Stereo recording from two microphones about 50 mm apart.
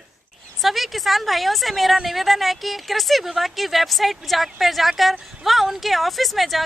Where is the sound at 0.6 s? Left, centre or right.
Centre.